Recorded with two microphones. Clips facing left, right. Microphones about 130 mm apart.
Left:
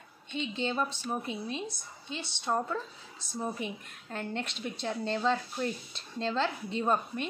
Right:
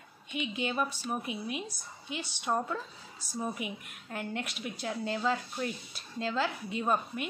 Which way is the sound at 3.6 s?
10° right (ahead or behind).